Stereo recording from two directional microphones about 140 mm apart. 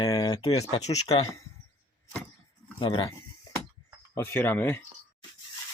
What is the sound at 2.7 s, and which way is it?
Speech, 35° left (ahead or behind).